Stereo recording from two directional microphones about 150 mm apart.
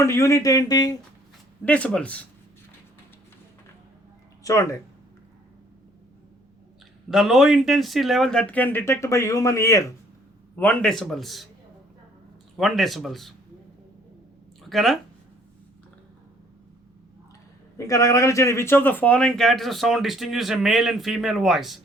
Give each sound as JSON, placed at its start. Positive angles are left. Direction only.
{"t": 0.0, "sound": "speech", "side_deg": 20}
{"t": 1.6, "sound": "speech", "side_deg": 10}
{"t": 4.4, "sound": "speech", "side_deg": 20}
{"t": 7.1, "sound": "speech", "side_deg": 0}
{"t": 10.5, "sound": "speech", "side_deg": 10}
{"t": 12.5, "sound": "speech", "side_deg": 0}
{"t": 14.7, "sound": "speech", "side_deg": 0}
{"t": 17.7, "sound": "speech", "side_deg": 20}